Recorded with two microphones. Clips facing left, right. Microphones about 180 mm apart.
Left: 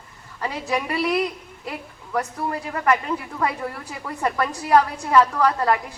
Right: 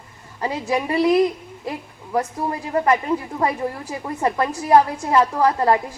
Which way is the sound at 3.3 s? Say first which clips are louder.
Right 3 dB; 25° right (ahead or behind).